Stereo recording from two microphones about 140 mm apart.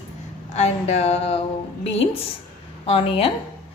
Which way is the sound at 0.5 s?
50° left (ahead or behind).